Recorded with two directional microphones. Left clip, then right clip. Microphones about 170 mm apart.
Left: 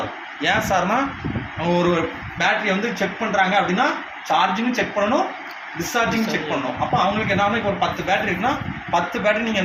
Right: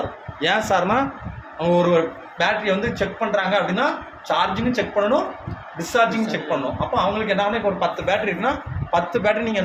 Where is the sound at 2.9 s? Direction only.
25° right (ahead or behind).